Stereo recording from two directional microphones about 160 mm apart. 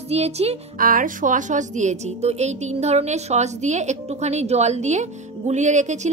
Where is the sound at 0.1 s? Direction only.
40° right (ahead or behind).